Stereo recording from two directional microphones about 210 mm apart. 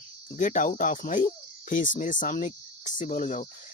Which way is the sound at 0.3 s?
35° left (ahead or behind).